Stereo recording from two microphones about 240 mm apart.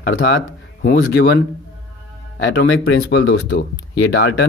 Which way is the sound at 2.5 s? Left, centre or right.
Left.